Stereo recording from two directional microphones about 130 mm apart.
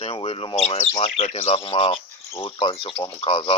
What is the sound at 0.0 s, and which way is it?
Speech, 45° left (ahead or behind).